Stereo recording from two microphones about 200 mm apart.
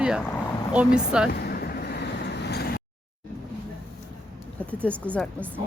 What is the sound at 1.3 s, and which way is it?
Vehicle, 50° left (ahead or behind).